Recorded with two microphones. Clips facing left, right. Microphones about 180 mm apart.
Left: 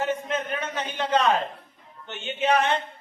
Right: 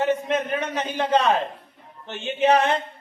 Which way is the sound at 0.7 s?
30° right (ahead or behind).